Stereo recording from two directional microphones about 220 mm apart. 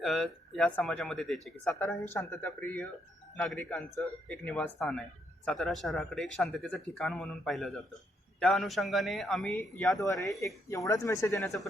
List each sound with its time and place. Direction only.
0.0 s speech: centre (ahead or behind)
10.0 s speech: 15° left (ahead or behind)